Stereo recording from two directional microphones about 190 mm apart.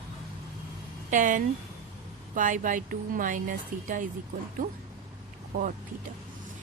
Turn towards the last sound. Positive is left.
turn(degrees=-50)  # may be behind; listen again after turning